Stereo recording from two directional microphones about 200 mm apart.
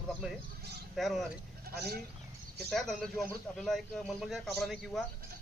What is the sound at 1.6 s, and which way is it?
Speech, 50° right (ahead or behind).